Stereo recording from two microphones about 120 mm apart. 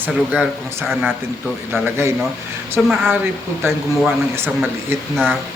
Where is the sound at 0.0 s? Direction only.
15° right (ahead or behind).